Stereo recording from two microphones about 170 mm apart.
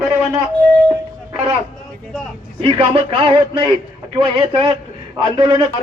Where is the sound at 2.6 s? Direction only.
35° right (ahead or behind).